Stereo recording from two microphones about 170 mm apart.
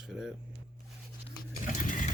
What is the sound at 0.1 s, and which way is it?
Speech, 5° right (ahead or behind).